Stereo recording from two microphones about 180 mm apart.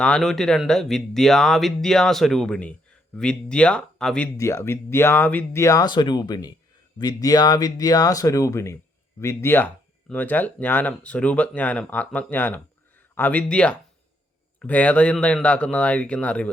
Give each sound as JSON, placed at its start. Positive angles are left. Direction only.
{"t": 0.0, "sound": "speech", "side_deg": 5}
{"t": 4.4, "sound": "speech", "side_deg": 15}